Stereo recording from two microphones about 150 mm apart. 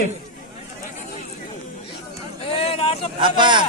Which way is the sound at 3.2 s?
30° right (ahead or behind).